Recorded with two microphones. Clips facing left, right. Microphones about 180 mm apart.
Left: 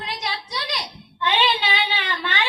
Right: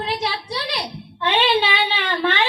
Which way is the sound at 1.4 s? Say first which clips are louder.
Right 5 dB; 30° right (ahead or behind).